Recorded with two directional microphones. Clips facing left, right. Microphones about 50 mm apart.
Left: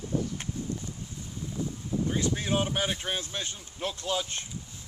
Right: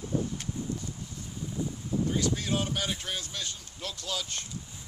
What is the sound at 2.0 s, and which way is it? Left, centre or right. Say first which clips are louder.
Speech: left 1 dB; left.